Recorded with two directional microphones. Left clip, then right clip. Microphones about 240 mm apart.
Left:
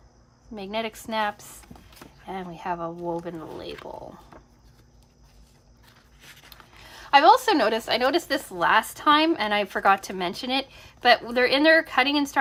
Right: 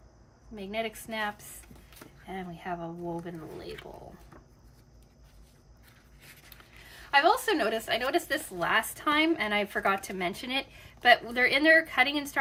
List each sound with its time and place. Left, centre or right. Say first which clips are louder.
0.5 s a woman's voice: left 4 dB; centre
6.2 s speech: left 5 dB; left